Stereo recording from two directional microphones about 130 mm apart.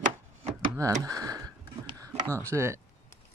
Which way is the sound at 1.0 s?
25° right (ahead or behind).